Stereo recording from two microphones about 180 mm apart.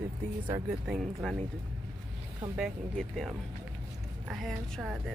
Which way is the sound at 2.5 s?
Centre (ahead or behind).